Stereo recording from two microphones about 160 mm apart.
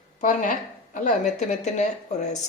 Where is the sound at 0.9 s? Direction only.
50° left (ahead or behind).